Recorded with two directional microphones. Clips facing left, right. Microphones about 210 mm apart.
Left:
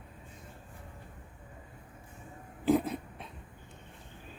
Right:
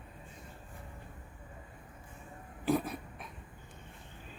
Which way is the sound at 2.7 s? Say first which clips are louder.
Left 4 dB; 20° left (ahead or behind).